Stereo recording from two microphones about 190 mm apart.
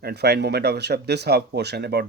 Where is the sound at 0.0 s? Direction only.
60° right (ahead or behind).